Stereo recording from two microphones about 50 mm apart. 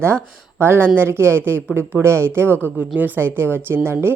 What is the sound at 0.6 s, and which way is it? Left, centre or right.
A woman's voice, right.